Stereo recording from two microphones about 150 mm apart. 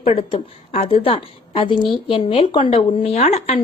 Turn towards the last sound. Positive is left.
turn(degrees=45)  # may be behind; listen again after turning